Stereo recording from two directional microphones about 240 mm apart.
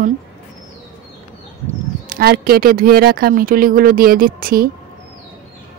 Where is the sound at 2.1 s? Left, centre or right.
Right.